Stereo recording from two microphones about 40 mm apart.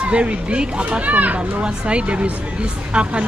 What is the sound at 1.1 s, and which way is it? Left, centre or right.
Speech, right.